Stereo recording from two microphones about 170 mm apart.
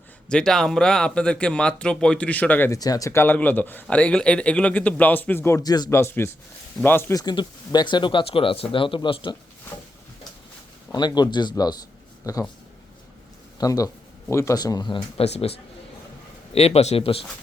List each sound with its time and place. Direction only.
0.3 s speech: 5° left (ahead or behind)
2.7 s a man's voice: 20° left (ahead or behind)
10.9 s speech: 25° left (ahead or behind)
13.6 s a man's voice: 20° left (ahead or behind)